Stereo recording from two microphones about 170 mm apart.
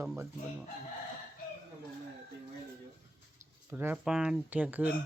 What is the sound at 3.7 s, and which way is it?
Speech, 10° right (ahead or behind).